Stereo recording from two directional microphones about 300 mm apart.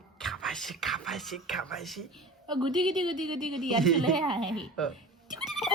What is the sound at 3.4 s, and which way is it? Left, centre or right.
Speech, centre.